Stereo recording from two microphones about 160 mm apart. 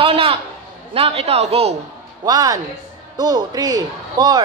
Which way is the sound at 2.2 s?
25° right (ahead or behind).